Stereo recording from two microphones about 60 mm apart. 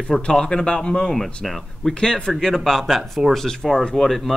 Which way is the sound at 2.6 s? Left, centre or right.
Centre.